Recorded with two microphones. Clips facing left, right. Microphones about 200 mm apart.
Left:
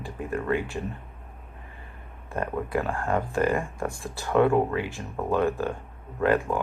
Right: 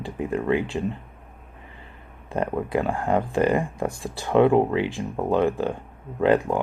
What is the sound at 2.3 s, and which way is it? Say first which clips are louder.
Speech: right 4 dB; 20° right (ahead or behind).